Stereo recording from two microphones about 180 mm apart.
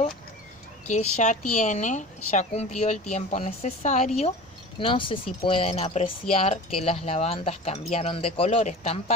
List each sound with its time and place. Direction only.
0.8 s speech: 40° left (ahead or behind)
4.7 s speech: 30° left (ahead or behind)